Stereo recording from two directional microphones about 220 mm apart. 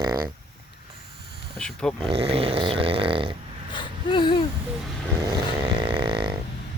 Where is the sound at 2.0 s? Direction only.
25° right (ahead or behind).